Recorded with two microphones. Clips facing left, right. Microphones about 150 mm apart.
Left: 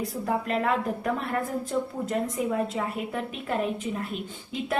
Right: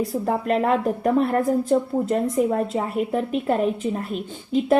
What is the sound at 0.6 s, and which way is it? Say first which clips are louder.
Speech: right 6 dB; 35° right (ahead or behind).